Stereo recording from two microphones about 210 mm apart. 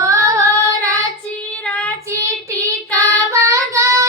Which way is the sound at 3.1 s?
15° right (ahead or behind).